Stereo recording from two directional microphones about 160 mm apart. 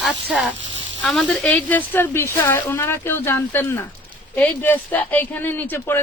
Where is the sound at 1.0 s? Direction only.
5° left (ahead or behind).